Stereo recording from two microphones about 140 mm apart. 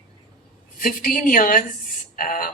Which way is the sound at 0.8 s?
90° left.